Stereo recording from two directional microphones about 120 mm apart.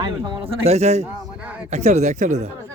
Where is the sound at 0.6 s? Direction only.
65° right (ahead or behind).